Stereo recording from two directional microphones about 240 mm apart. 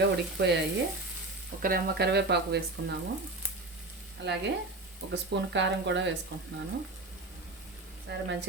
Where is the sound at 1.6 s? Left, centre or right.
Right.